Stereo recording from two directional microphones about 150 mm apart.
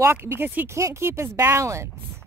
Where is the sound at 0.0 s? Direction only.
15° right (ahead or behind).